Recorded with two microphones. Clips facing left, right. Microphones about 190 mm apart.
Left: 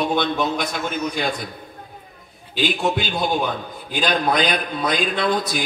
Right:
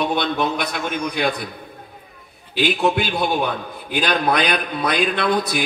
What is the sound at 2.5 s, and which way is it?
A man's voice, 60° right (ahead or behind).